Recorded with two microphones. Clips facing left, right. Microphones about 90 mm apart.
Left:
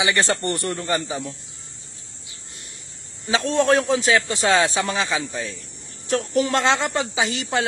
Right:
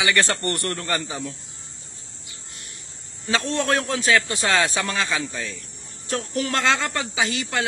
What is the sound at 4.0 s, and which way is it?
A man's voice, 20° left (ahead or behind).